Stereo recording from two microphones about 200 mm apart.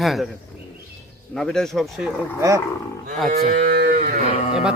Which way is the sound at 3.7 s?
50° right (ahead or behind).